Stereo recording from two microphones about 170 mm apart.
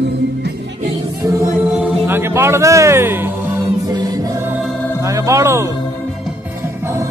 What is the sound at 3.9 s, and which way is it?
Music, 25° right (ahead or behind).